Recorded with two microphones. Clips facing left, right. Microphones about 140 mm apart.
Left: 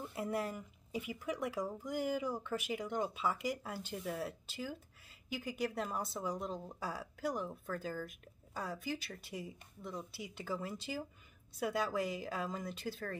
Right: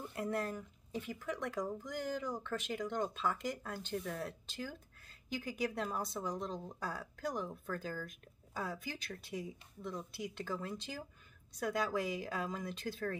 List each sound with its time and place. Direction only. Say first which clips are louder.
0.1 s speech: right 1 dB; 5° left (ahead or behind)